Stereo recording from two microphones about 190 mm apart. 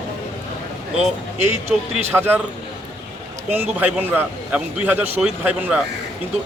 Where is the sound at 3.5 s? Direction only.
10° right (ahead or behind).